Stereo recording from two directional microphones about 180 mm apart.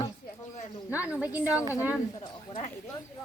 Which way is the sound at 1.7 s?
15° left (ahead or behind).